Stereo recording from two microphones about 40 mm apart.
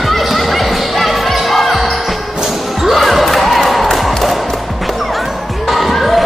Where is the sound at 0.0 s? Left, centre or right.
Centre.